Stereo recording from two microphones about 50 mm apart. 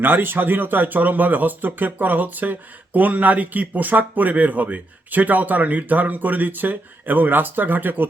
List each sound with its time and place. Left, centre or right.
0.0 s speech: right